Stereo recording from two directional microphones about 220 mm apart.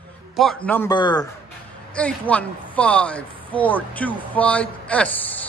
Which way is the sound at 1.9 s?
5° left (ahead or behind).